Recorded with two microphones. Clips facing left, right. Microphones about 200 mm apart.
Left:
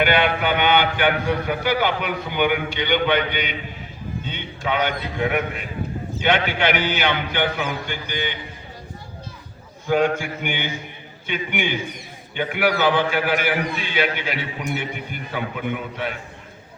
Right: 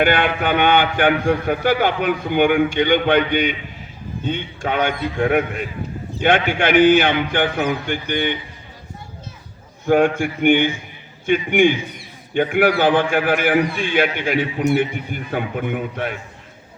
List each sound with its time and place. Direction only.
0.0 s a man's voice: 50° right (ahead or behind)
9.8 s a man's voice: 50° right (ahead or behind)